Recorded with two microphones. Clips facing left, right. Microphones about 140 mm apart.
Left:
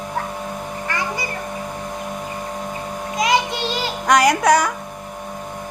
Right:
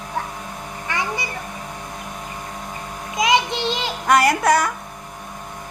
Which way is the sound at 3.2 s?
20° right (ahead or behind).